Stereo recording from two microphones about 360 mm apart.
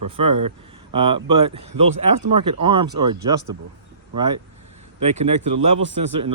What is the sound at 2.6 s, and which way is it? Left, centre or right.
Speech, centre.